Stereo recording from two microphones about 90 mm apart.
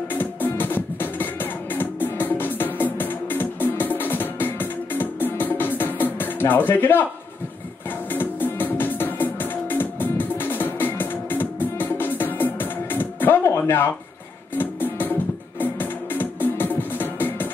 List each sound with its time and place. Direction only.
0.1 s music: 20° left (ahead or behind)
8.1 s music: 20° left (ahead or behind)